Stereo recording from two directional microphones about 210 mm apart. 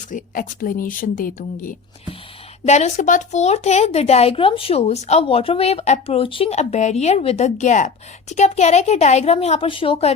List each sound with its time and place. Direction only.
0.1 s a woman's voice: 40° left (ahead or behind)
2.6 s a woman's voice: 35° left (ahead or behind)